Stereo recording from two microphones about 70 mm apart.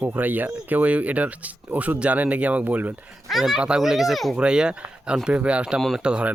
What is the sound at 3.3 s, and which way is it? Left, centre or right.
Speech, centre.